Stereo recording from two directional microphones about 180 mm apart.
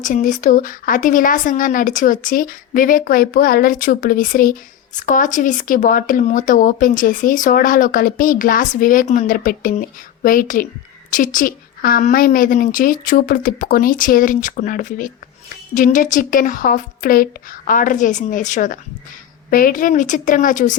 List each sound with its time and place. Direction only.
0.0 s a woman's voice: 45° left (ahead or behind)